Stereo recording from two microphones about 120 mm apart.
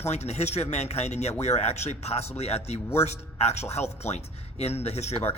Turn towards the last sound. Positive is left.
turn(degrees=65)  # may be behind; listen again after turning